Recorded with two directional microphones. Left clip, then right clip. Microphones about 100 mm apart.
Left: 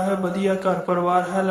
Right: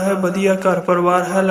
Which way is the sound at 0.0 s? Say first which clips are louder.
Right 5 dB; 30° right (ahead or behind).